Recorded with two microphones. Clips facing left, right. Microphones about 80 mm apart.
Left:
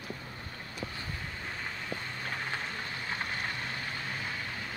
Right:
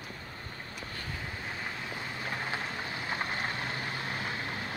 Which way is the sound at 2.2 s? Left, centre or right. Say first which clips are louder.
Right 3 dB; centre.